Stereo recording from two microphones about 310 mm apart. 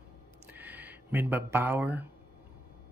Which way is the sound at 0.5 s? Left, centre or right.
Centre.